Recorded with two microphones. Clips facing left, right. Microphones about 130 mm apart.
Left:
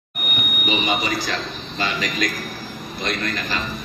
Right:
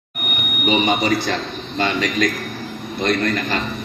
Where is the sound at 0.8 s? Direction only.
55° right (ahead or behind).